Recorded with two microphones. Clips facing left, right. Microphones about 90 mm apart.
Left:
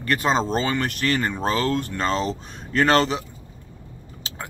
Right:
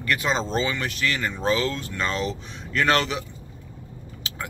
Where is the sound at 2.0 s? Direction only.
35° left (ahead or behind).